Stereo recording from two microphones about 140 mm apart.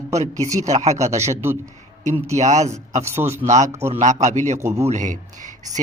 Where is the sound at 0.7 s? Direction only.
55° right (ahead or behind).